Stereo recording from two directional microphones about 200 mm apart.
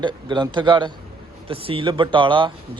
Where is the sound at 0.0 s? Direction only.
20° right (ahead or behind).